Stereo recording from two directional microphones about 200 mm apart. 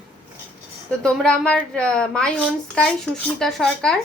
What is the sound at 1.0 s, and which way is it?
A woman's voice, 5° left (ahead or behind).